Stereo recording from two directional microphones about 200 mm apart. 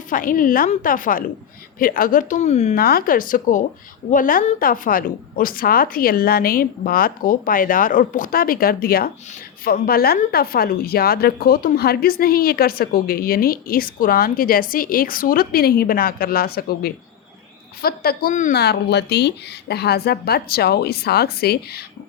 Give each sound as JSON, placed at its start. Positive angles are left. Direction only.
{"t": 0.1, "sound": "a woman's voice", "side_deg": 45}
{"t": 2.7, "sound": "speech", "side_deg": 50}
{"t": 18.6, "sound": "speech", "side_deg": 55}